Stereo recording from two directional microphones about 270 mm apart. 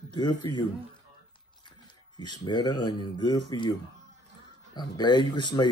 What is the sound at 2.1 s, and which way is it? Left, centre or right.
Speech, centre.